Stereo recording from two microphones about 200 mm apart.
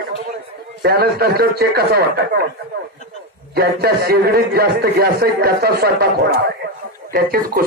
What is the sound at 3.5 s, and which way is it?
A man's voice, 50° right (ahead or behind).